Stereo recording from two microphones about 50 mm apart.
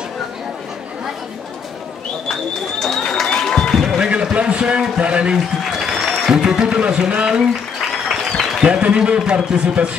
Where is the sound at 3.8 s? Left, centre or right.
Centre.